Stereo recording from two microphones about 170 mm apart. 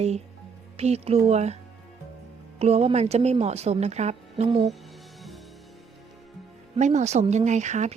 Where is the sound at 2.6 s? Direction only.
35° right (ahead or behind).